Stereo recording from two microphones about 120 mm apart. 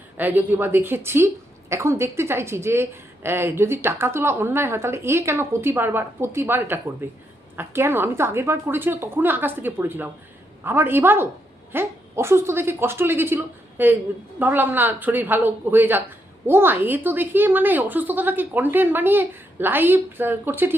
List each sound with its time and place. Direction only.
0.2 s a woman's voice: 15° right (ahead or behind)